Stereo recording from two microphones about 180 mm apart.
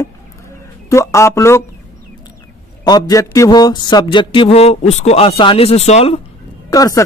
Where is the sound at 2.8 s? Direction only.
20° left (ahead or behind).